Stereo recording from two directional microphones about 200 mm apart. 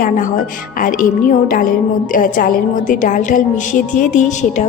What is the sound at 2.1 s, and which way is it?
A woman's voice, 45° left (ahead or behind).